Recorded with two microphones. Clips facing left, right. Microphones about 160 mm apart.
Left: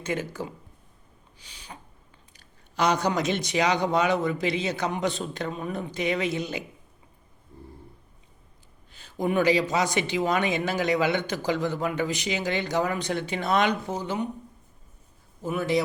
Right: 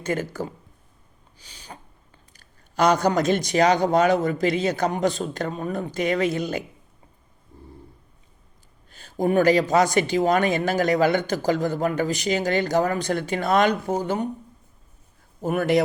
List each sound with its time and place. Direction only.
0.0 s speech: 40° right (ahead or behind)
1.4 s a sound: 35° right (ahead or behind)
2.3 s speech: 45° right (ahead or behind)
8.9 s speech: 45° right (ahead or behind)
15.4 s a man's voice: 55° right (ahead or behind)